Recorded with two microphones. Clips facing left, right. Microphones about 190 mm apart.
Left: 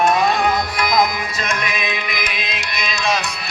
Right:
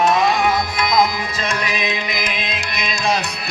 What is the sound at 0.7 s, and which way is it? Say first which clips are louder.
Music: even; 25° right (ahead or behind).